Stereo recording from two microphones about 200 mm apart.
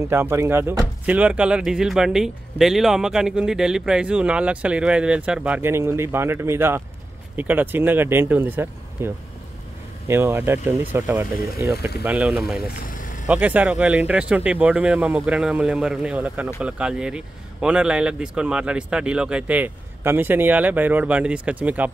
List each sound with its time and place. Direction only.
0.1 s speech: 10° right (ahead or behind)
12.5 s boat: 45° left (ahead or behind)
13.3 s speech: 5° right (ahead or behind)